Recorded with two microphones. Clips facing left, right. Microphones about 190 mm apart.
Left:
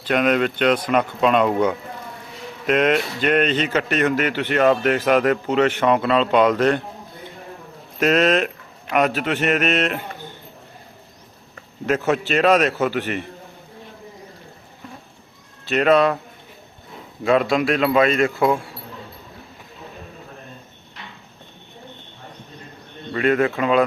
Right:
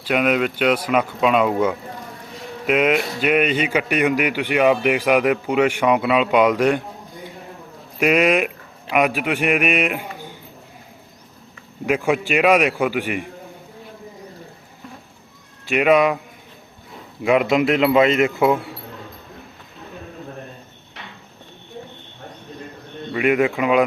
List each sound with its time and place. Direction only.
0.0 s speech: 5° right (ahead or behind)
7.9 s a man's voice: 10° right (ahead or behind)
11.9 s speech: 10° right (ahead or behind)
15.6 s speech: 10° right (ahead or behind)
17.2 s speech: 15° right (ahead or behind)
23.1 s speech: 15° right (ahead or behind)